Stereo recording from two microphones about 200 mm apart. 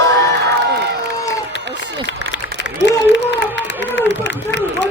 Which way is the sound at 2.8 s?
60° left (ahead or behind).